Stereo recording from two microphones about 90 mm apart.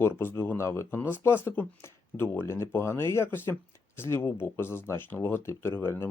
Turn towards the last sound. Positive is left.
turn(degrees=25)  # may be behind; listen again after turning